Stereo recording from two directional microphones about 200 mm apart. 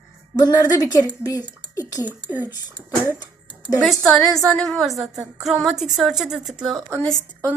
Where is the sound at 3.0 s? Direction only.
20° left (ahead or behind).